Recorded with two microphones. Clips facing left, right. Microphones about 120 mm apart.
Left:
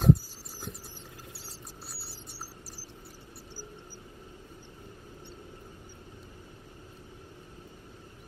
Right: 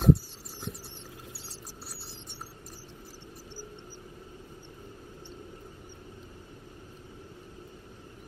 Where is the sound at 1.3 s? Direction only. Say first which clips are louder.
Right 1 dB; centre (ahead or behind).